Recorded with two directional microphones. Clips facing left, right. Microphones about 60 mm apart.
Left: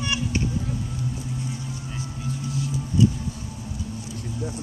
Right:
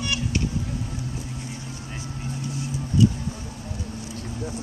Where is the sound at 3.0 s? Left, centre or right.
Left.